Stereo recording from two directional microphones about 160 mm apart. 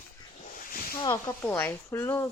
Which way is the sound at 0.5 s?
65° left (ahead or behind).